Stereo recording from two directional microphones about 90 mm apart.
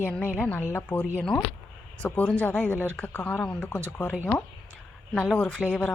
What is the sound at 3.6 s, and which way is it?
Speech, 20° left (ahead or behind).